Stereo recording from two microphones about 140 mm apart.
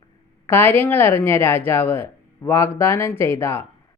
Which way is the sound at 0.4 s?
15° left (ahead or behind).